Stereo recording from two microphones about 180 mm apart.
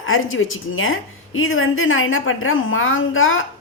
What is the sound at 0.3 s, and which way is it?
Speech, 90° left.